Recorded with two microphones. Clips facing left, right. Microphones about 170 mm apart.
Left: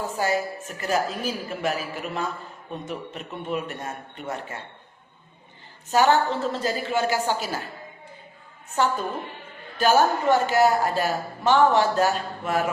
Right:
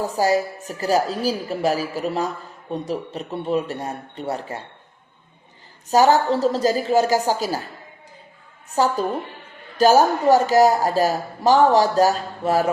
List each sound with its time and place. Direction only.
0.0 s speech: 35° right (ahead or behind)
5.9 s speech: 40° right (ahead or behind)
8.7 s speech: 35° right (ahead or behind)